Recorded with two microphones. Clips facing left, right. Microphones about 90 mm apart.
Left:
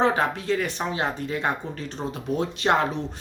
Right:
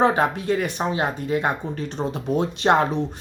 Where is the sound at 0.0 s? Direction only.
20° right (ahead or behind).